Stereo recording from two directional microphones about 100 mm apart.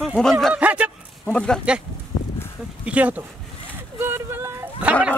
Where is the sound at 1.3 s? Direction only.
10° left (ahead or behind).